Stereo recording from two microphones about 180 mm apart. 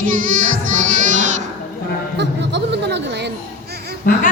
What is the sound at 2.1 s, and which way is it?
A man's voice, 70° right (ahead or behind).